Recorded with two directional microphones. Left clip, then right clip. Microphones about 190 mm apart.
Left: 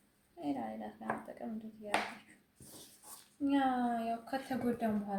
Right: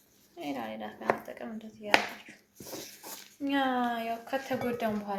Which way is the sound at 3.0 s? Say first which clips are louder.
Right 11 dB; 15° right (ahead or behind).